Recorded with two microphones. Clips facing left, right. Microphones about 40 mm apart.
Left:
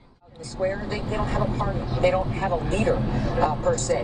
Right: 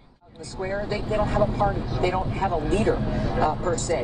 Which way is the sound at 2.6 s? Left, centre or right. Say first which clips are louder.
Right 1 dB; right.